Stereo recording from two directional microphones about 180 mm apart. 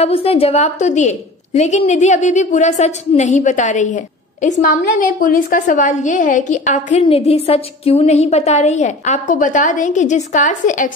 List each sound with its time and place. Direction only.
0.0 s a woman's voice: 35° left (ahead or behind)